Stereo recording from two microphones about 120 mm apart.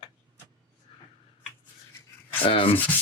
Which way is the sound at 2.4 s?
45° left (ahead or behind).